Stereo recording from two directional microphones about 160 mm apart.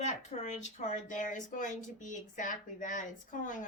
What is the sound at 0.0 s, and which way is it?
Speech, 45° left (ahead or behind).